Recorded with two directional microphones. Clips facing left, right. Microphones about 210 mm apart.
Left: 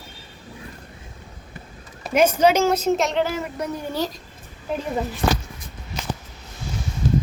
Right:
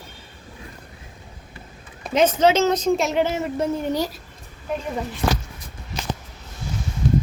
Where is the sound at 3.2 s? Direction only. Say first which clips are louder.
Right 2 dB; 25° right (ahead or behind).